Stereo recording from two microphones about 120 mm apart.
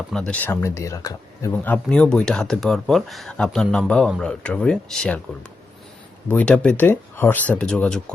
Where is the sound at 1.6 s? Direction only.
10° left (ahead or behind).